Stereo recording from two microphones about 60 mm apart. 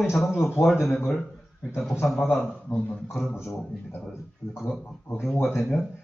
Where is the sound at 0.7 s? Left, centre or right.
Centre.